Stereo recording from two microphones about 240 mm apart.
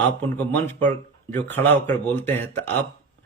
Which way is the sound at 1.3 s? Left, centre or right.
Centre.